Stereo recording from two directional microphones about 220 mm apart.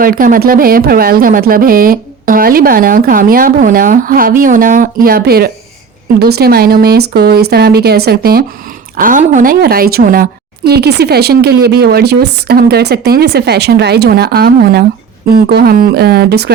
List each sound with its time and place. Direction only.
0.0 s a woman's voice: 40° right (ahead or behind)